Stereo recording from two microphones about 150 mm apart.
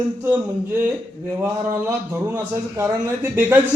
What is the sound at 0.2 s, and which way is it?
A man's voice, 10° right (ahead or behind).